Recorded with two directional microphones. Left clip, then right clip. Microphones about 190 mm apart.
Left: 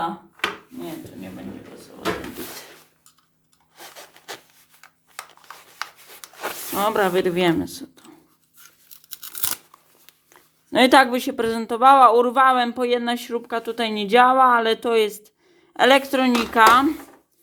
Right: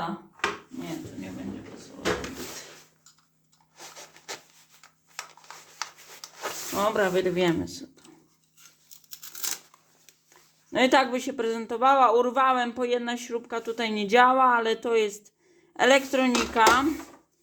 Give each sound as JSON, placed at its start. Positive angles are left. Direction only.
{"t": 3.8, "sound": "rub", "side_deg": 40}
{"t": 5.8, "sound": "rub", "side_deg": 40}
{"t": 6.7, "sound": "speech", "side_deg": 35}
{"t": 10.7, "sound": "speech", "side_deg": 30}